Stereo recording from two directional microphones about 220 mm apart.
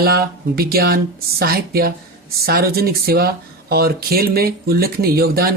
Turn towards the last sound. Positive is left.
turn(degrees=-45)  # may be behind; listen again after turning